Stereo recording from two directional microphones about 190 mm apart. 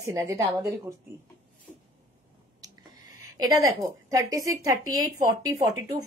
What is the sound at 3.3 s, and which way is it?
A woman's voice, 20° right (ahead or behind).